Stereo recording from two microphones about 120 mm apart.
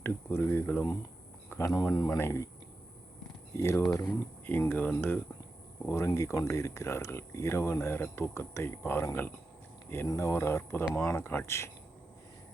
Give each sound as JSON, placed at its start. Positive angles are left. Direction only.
{"t": 0.0, "sound": "speech", "side_deg": 20}
{"t": 3.5, "sound": "speech", "side_deg": 25}